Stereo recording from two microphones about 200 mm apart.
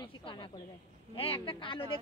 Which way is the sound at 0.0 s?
25° left (ahead or behind).